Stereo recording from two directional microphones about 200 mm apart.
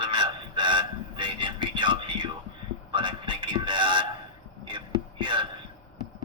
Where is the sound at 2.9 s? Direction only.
25° right (ahead or behind).